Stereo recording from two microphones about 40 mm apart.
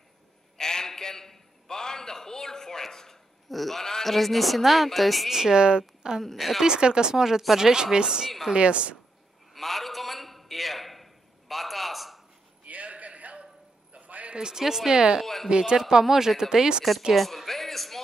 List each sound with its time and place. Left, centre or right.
0.6 s a sound: centre
3.4 s speech: centre
5.3 s speech: centre
5.6 s a woman's voice: right
6.3 s speech: centre
6.6 s speech: centre
8.5 s a woman's voice: right
9.5 s a sound: centre
12.6 s a sound: right
14.4 s a woman's voice: centre
17.1 s music: centre